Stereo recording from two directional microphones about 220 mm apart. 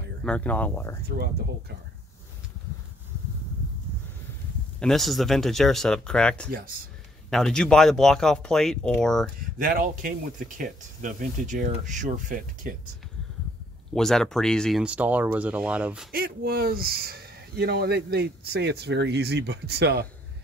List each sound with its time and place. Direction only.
0.2 s speech: 5° left (ahead or behind)
1.0 s speech: 45° right (ahead or behind)
4.7 s speech: centre (ahead or behind)
9.6 s speech: 40° right (ahead or behind)
13.9 s speech: centre (ahead or behind)
16.1 s speech: 45° right (ahead or behind)